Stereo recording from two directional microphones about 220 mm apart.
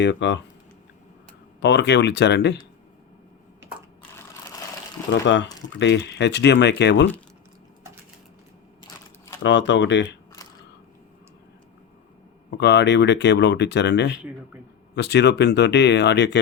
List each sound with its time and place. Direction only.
0.0 s speech: 55° left (ahead or behind)
1.6 s speech: 50° left (ahead or behind)
3.6 s a sound: 5° right (ahead or behind)
5.2 s speech: 55° left (ahead or behind)
9.4 s speech: 55° left (ahead or behind)
12.5 s speech: 50° left (ahead or behind)
14.2 s speech: 5° right (ahead or behind)
14.9 s speech: 50° left (ahead or behind)